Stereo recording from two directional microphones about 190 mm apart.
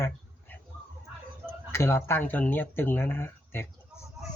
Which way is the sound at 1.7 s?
15° left (ahead or behind).